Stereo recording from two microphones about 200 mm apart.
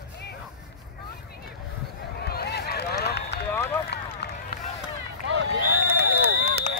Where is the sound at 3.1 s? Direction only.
55° left (ahead or behind).